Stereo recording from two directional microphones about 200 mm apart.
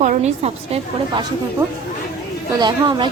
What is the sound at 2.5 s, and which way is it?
Speech, 20° right (ahead or behind).